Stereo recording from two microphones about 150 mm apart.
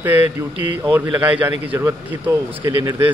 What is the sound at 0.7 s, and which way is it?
A man's voice, 10° right (ahead or behind).